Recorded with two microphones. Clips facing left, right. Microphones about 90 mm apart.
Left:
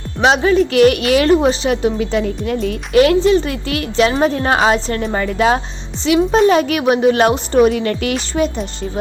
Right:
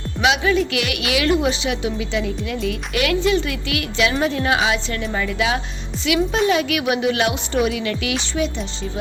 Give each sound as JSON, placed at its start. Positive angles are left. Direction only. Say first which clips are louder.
{"t": 0.2, "sound": "a woman's voice", "louder": "left 5 dB", "side_deg": 40}